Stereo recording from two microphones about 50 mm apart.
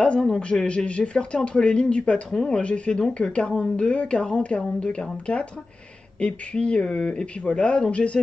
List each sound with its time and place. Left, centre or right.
0.0 s a man's voice: left